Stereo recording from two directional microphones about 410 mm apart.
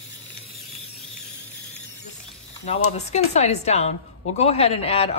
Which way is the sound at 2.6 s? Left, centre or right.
Centre.